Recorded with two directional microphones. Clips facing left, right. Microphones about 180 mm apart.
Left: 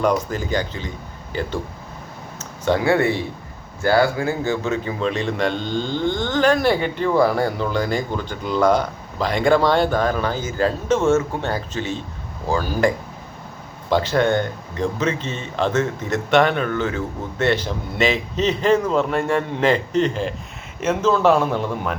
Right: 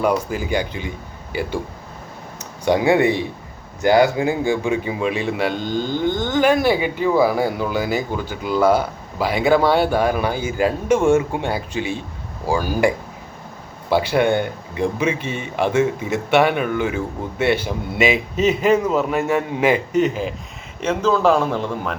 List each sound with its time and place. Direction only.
0.0 s speech: 10° right (ahead or behind)
13.9 s a man's voice: 10° right (ahead or behind)